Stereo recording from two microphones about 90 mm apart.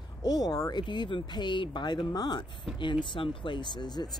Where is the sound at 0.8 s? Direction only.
60° left (ahead or behind).